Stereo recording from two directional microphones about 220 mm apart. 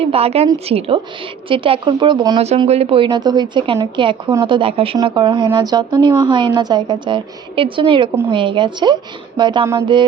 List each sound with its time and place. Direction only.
0.0 s speech: 25° right (ahead or behind)